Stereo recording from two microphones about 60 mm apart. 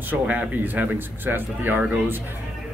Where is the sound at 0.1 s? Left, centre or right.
Right.